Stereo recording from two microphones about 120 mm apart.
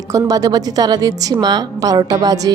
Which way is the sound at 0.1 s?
30° right (ahead or behind).